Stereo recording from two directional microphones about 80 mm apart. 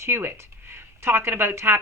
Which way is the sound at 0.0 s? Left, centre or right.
Right.